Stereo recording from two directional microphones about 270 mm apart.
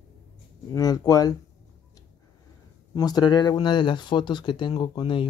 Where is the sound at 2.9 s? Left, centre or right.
Centre.